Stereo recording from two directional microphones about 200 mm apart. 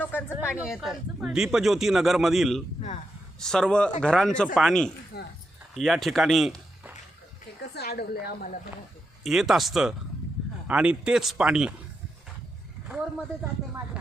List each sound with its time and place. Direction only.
0.0 s speech: 10° left (ahead or behind)
0.5 s speech: 5° right (ahead or behind)
5.1 s a sound: 55° left (ahead or behind)
5.7 s speech: centre (ahead or behind)
7.7 s a woman's voice: 55° left (ahead or behind)
9.2 s speech: centre (ahead or behind)